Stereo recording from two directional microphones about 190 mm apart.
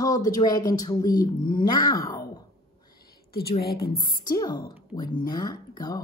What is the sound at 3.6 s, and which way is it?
Speech, 55° left (ahead or behind).